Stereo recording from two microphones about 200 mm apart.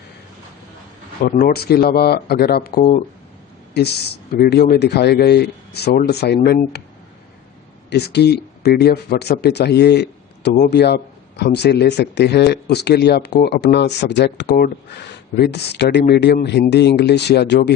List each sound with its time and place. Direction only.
1.2 s speech: 45° left (ahead or behind)
7.9 s speech: 55° left (ahead or behind)